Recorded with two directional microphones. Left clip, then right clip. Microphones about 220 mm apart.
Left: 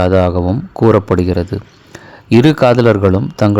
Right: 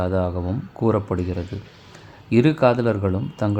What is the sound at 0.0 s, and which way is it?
Speech, 40° left (ahead or behind).